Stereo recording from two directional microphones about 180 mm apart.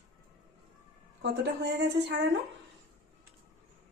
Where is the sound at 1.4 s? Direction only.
75° right (ahead or behind).